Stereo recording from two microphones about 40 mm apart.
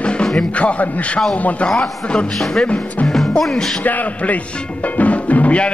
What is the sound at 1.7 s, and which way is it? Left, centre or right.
Speech, centre.